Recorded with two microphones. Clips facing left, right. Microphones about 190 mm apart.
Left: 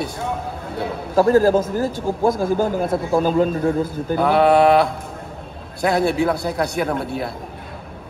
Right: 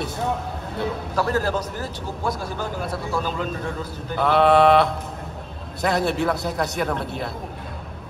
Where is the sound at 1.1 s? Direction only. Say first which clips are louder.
Left 10 dB; 45° left (ahead or behind).